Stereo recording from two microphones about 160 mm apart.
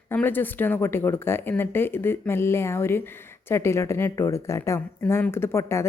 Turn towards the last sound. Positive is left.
turn(degrees=15)  # may be behind; listen again after turning